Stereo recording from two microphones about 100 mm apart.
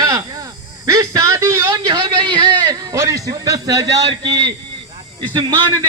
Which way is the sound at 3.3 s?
40° right (ahead or behind).